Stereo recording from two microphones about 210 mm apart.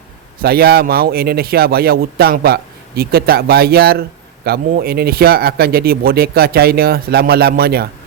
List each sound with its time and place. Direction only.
0.4 s speech: 50° right (ahead or behind)